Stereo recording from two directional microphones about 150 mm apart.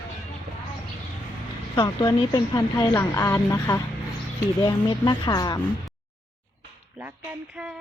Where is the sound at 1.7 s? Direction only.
30° left (ahead or behind).